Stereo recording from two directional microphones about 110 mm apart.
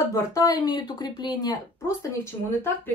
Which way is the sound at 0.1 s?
35° left (ahead or behind).